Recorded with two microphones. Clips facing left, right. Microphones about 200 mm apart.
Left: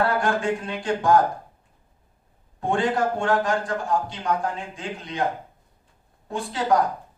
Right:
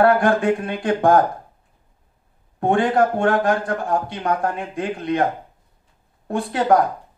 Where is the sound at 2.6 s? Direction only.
60° right (ahead or behind).